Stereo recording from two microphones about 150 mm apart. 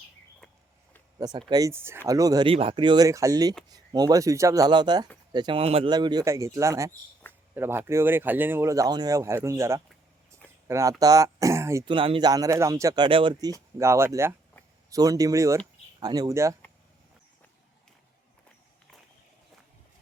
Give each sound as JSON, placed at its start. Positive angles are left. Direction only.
{"t": 1.2, "sound": "speech", "side_deg": -30}
{"t": 2.5, "sound": "speech", "side_deg": -35}
{"t": 5.9, "sound": "speech", "side_deg": -30}
{"t": 11.9, "sound": "speech", "side_deg": -35}
{"t": 12.3, "sound": "speech", "side_deg": -20}